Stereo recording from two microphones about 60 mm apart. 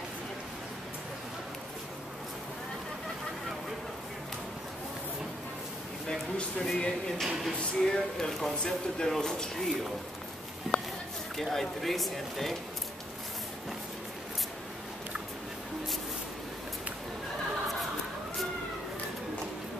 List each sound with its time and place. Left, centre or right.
6.0 s speech: centre
7.2 s speech: centre
7.5 s speech: centre
8.3 s speech: centre
11.3 s speech: centre